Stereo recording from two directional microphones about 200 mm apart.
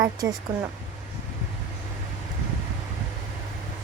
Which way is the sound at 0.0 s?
20° right (ahead or behind).